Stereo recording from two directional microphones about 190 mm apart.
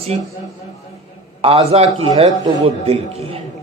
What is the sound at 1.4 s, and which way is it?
Speech, 30° right (ahead or behind).